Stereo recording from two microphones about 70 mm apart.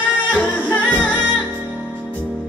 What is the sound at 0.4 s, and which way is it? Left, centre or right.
Music, left.